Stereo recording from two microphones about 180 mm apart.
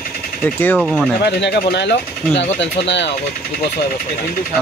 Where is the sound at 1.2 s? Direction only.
65° left (ahead or behind).